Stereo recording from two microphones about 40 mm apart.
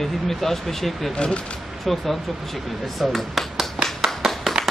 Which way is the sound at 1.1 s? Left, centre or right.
Left.